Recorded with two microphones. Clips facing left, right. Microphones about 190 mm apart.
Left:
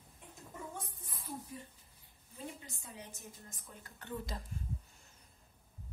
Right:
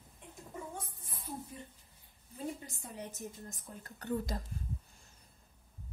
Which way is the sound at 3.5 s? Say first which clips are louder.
Right 5 dB; 40° right (ahead or behind).